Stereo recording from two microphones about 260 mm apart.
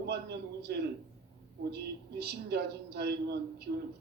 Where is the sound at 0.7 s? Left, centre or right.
Right.